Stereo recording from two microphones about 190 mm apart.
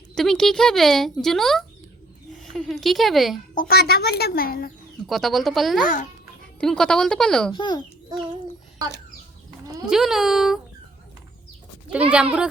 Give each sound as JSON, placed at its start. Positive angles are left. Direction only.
{"t": 0.1, "sound": "a woman's voice", "side_deg": 5}
{"t": 3.5, "sound": "speech", "side_deg": 50}
{"t": 5.0, "sound": "speech", "side_deg": 0}
{"t": 5.8, "sound": "a child's voice", "side_deg": 45}
{"t": 6.6, "sound": "speech", "side_deg": 5}
{"t": 7.5, "sound": "a child's voice", "side_deg": 25}
{"t": 9.8, "sound": "speech", "side_deg": 0}
{"t": 11.9, "sound": "speech", "side_deg": -5}